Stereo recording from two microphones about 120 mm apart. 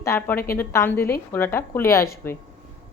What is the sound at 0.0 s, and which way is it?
Speech, 20° left (ahead or behind).